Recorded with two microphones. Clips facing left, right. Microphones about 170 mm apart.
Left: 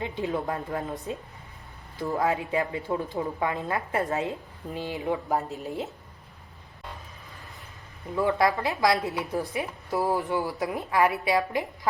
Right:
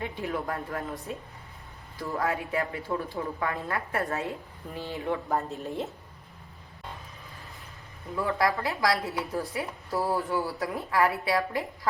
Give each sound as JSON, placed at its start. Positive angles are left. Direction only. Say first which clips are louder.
{"t": 0.0, "sound": "a woman's voice", "louder": "left 3 dB", "side_deg": 20}
{"t": 5.4, "sound": "a woman's voice", "louder": "even", "side_deg": 0}
{"t": 8.1, "sound": "a woman's voice", "louder": "left 3 dB", "side_deg": 20}